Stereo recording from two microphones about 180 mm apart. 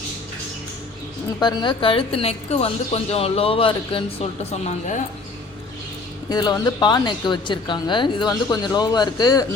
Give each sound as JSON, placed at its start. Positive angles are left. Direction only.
{"t": 1.4, "sound": "a woman's voice", "side_deg": 25}
{"t": 6.3, "sound": "a woman's voice", "side_deg": 25}